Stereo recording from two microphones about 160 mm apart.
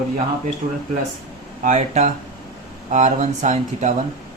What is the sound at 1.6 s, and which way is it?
Speech, 50° right (ahead or behind).